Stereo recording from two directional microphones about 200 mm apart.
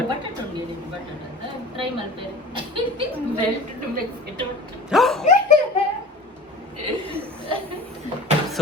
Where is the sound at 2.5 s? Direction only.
25° right (ahead or behind).